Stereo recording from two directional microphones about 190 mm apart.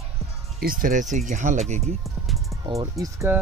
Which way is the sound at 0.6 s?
45° right (ahead or behind).